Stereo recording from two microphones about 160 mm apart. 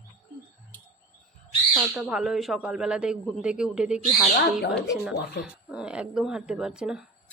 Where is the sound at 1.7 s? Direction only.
5° right (ahead or behind).